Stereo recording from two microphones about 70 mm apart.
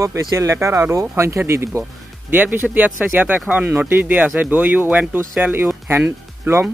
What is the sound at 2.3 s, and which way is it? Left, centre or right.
Speech, right.